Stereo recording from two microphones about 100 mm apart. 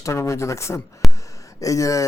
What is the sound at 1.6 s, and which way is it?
Speech, 35° left (ahead or behind).